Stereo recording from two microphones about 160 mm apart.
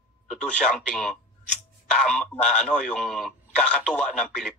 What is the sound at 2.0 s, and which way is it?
Speech, 5° left (ahead or behind).